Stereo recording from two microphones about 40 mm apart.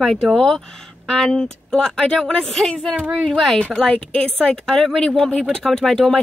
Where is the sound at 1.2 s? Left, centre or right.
Centre.